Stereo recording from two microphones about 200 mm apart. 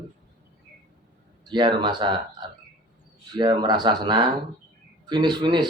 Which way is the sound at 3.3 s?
20° right (ahead or behind).